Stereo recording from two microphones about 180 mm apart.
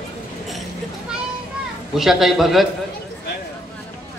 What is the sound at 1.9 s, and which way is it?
Speech, centre (ahead or behind).